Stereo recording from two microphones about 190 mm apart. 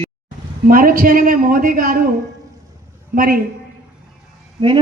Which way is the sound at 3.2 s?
50° right (ahead or behind).